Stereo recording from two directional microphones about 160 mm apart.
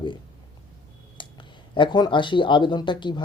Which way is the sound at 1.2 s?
30° left (ahead or behind).